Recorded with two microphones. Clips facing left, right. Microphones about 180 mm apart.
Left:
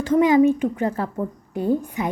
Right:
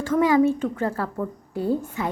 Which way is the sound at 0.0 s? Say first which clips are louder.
Left 3 dB; 20° left (ahead or behind).